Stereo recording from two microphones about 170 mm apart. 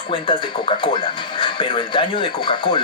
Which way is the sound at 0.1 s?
30° left (ahead or behind).